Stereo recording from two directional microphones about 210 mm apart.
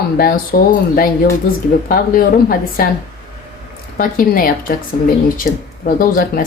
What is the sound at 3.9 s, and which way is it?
Speech, 40° left (ahead or behind).